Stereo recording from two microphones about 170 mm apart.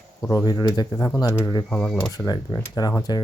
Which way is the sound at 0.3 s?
20° left (ahead or behind).